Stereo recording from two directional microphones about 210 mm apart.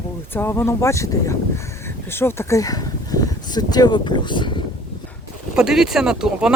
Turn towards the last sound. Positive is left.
turn(degrees=-5)  # may be behind; listen again after turning